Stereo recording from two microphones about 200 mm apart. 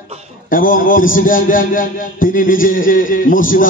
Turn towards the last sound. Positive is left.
turn(degrees=45)  # may be behind; listen again after turning